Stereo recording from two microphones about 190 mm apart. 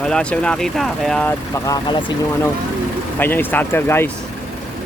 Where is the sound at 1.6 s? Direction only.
20° left (ahead or behind).